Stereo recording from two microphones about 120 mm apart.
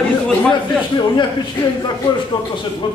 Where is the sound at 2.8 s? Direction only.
40° left (ahead or behind).